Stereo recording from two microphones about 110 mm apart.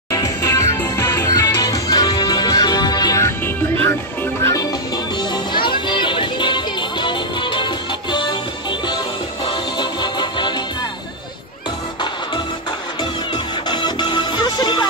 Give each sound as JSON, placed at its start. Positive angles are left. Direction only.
{"t": 0.1, "sound": "music", "side_deg": 30}
{"t": 5.3, "sound": "music", "side_deg": 45}
{"t": 9.5, "sound": "music", "side_deg": 45}
{"t": 13.7, "sound": "music", "side_deg": 40}